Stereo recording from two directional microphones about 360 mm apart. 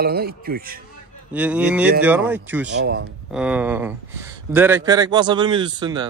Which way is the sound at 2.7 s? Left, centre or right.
Right.